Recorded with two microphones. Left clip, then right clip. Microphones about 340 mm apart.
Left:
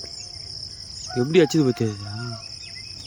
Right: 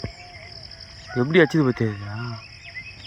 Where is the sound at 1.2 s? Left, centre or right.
Centre.